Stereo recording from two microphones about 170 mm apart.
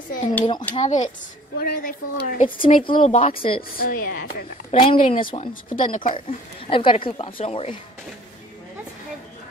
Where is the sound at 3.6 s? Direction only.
60° left (ahead or behind).